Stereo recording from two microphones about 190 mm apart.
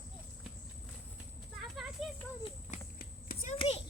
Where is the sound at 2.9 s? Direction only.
50° left (ahead or behind).